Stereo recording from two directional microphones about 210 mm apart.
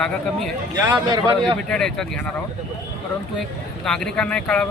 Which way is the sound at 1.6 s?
5° left (ahead or behind).